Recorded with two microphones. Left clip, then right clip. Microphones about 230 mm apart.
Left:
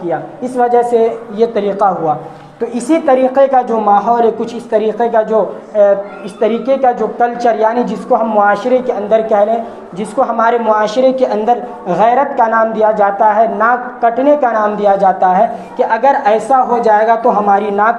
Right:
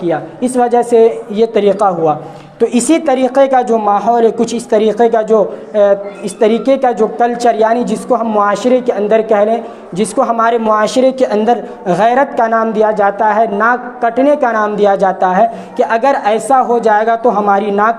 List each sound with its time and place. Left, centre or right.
0.1 s a woman's voice: right